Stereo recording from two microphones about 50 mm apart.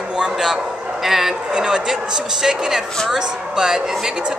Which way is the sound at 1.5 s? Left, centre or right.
Centre.